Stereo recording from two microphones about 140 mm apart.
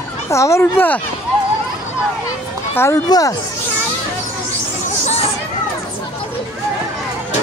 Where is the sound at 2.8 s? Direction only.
25° left (ahead or behind).